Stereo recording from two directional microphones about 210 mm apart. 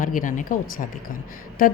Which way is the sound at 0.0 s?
40° left (ahead or behind).